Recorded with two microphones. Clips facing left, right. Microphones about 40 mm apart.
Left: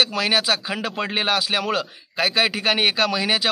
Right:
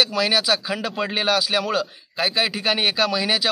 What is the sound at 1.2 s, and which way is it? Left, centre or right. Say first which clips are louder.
Speech: right 2 dB; left.